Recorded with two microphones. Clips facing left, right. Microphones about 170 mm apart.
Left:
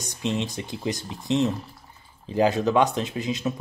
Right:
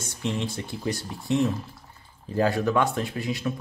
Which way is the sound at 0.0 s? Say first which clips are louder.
Left 2 dB; 20° left (ahead or behind).